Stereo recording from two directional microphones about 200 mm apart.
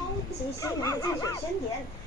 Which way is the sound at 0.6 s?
15° left (ahead or behind).